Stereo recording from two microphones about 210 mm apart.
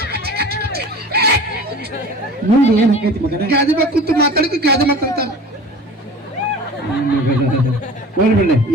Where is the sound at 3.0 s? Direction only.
50° right (ahead or behind).